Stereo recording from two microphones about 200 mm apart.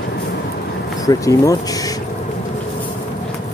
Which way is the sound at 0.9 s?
15° left (ahead or behind).